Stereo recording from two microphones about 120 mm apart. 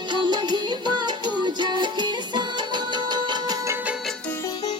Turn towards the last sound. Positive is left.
turn(degrees=-35)  # may be behind; listen again after turning